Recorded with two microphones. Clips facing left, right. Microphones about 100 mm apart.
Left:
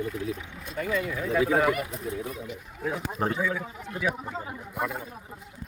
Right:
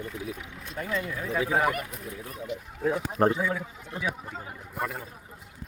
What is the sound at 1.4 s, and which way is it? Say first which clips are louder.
Speech: left 2 dB; 15° right (ahead or behind).